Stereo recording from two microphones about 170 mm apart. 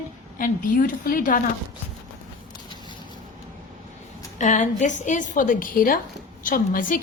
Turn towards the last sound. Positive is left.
turn(degrees=55)  # may be behind; listen again after turning